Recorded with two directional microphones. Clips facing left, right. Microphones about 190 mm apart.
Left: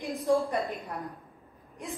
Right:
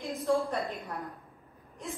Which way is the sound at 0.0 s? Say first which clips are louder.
Left 2 dB; 15° left (ahead or behind).